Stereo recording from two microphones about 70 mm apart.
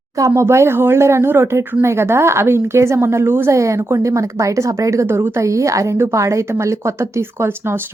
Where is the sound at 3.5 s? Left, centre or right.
Right.